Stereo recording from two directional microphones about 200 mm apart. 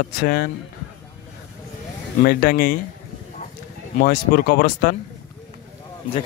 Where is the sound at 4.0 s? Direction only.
45° left (ahead or behind).